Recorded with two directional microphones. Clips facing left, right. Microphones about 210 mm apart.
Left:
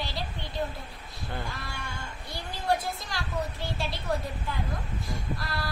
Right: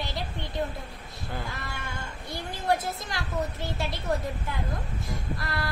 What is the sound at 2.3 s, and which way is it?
Speech, 20° right (ahead or behind).